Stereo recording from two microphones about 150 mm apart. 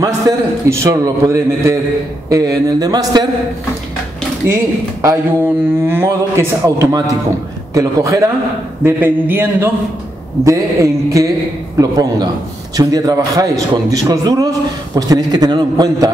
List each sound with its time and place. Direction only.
0.7 s a man's voice: 20° right (ahead or behind)
5.0 s a man's voice: 15° right (ahead or behind)